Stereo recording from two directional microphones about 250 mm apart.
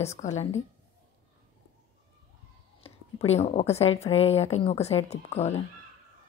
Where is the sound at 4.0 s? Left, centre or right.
Left.